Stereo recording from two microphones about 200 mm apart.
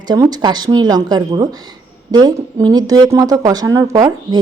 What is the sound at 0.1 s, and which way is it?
Speech, 20° right (ahead or behind).